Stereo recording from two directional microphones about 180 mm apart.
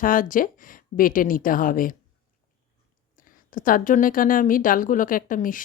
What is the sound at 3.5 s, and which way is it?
Speech, 50° left (ahead or behind).